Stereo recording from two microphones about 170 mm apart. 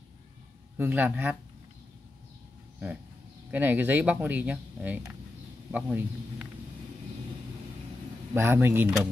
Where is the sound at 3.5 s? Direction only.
10° right (ahead or behind).